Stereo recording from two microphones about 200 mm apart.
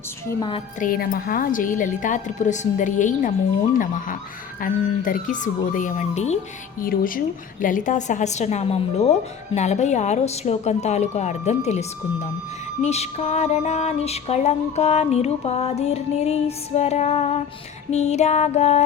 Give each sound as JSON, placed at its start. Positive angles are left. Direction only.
{"t": 0.8, "sound": "music", "side_deg": 45}
{"t": 4.6, "sound": "music", "side_deg": 45}